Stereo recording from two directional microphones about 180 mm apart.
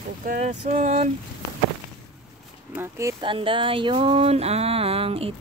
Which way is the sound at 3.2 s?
30° right (ahead or behind).